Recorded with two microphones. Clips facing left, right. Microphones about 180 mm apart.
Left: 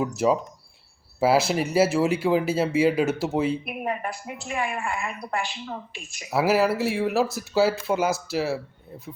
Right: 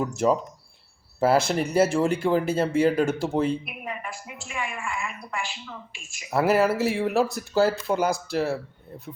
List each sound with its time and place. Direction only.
0.2 s speech: 5° left (ahead or behind)
3.7 s a woman's voice: 40° left (ahead or behind)
6.3 s speech: centre (ahead or behind)